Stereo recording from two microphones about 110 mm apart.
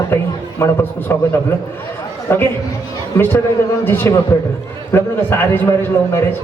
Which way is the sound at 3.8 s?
20° left (ahead or behind).